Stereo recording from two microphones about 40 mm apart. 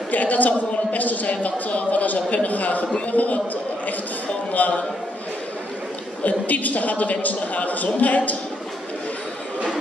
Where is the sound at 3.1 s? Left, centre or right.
Left.